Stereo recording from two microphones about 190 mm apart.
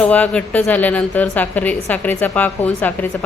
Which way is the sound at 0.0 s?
10° left (ahead or behind).